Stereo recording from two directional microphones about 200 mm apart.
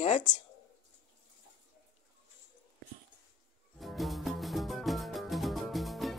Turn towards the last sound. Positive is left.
turn(degrees=0)  # may be behind; listen again after turning